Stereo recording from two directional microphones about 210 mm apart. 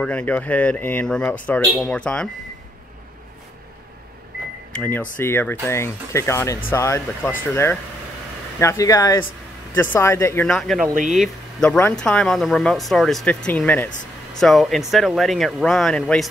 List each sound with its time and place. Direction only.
0.0 s speech: 5° left (ahead or behind)
4.7 s speech: 10° left (ahead or behind)